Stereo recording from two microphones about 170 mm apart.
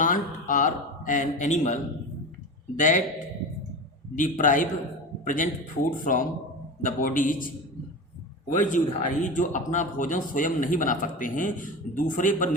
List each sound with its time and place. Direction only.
0.0 s speech: 50° left (ahead or behind)
4.1 s a man's voice: 50° left (ahead or behind)
8.5 s speech: 50° left (ahead or behind)